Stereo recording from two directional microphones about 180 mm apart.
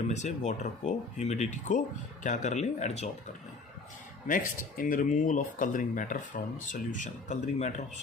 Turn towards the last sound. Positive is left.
turn(degrees=40)  # may be behind; listen again after turning